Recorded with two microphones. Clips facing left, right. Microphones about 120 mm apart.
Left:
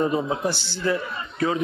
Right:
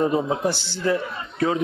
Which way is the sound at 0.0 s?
30° right (ahead or behind).